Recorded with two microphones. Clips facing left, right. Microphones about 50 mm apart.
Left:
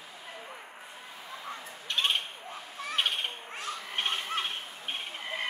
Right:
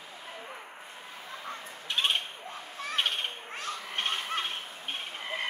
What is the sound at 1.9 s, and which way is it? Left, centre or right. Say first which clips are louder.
Bird: even; centre.